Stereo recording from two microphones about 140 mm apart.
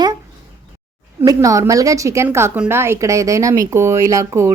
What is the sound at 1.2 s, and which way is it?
Speech, 25° right (ahead or behind).